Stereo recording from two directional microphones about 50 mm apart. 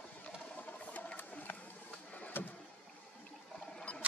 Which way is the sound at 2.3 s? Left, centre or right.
Left.